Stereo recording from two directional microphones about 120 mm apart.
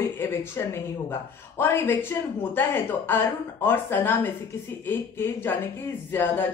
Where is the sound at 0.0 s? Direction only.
20° left (ahead or behind).